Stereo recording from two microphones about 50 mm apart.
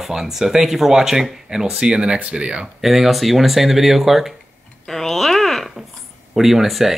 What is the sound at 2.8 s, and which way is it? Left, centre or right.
Speech, centre.